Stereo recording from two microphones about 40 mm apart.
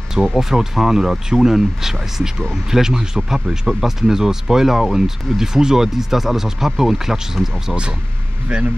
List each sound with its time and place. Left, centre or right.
0.2 s speech: centre
8.5 s speech: right